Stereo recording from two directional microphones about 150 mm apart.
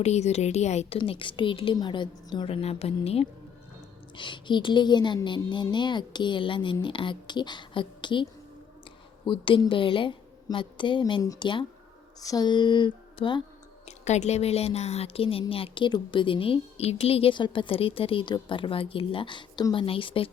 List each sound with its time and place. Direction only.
0.0 s a woman's voice: 45° left (ahead or behind)
0.9 s a woman's voice: 35° left (ahead or behind)
13.8 s a woman's voice: 50° left (ahead or behind)